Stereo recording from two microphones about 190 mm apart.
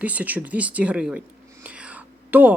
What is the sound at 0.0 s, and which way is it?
Speech, 10° right (ahead or behind).